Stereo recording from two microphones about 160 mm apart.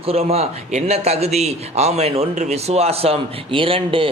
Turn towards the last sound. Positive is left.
turn(degrees=-35)  # may be behind; listen again after turning